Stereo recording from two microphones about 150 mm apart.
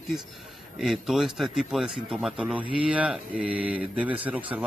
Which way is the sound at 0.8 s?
Centre (ahead or behind).